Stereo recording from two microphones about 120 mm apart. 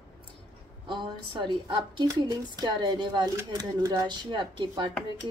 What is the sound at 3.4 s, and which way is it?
Speech, 30° right (ahead or behind).